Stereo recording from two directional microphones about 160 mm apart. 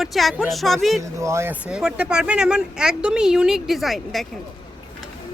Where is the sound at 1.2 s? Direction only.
15° right (ahead or behind).